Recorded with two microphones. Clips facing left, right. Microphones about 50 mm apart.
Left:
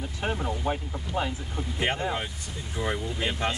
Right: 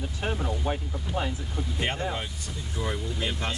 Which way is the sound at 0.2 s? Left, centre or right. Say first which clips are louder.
Left 1 dB; centre.